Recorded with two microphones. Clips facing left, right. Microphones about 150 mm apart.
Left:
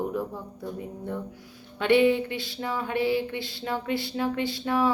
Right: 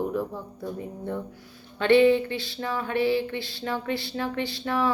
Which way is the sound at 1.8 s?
10° left (ahead or behind).